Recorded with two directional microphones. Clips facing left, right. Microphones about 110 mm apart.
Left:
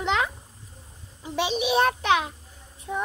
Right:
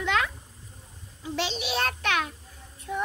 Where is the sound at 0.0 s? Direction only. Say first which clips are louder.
Left 2 dB; 20° left (ahead or behind).